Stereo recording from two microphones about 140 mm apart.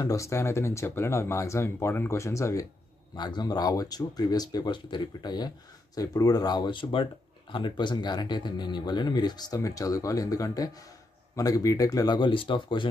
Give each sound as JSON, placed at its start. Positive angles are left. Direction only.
{"t": 0.0, "sound": "speech", "side_deg": 20}
{"t": 3.2, "sound": "speech", "side_deg": 30}